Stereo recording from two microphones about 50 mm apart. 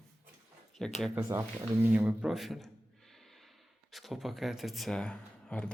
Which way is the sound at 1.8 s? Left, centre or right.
Right.